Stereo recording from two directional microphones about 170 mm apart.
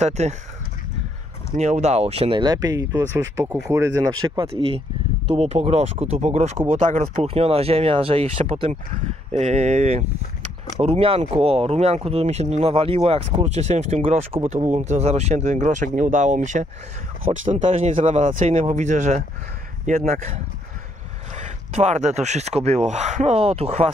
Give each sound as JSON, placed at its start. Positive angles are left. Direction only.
{"t": 0.0, "sound": "speech", "side_deg": -40}
{"t": 1.6, "sound": "speech", "side_deg": -40}